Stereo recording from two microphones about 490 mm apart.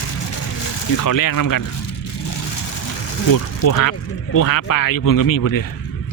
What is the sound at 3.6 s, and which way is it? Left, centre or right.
Speech, left.